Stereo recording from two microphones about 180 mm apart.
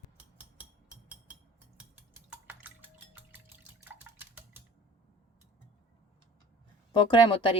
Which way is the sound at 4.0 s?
10° right (ahead or behind).